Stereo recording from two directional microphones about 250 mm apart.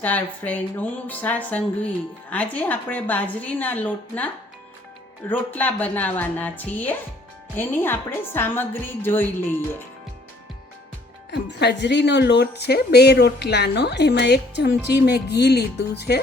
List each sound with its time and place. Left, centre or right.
0.0 s a woman's voice: centre
5.3 s a woman's voice: centre
11.3 s speech: left